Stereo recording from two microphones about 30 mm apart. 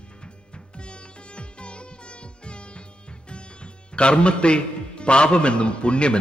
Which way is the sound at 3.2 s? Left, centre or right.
Left.